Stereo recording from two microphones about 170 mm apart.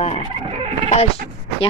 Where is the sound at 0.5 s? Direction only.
35° right (ahead or behind).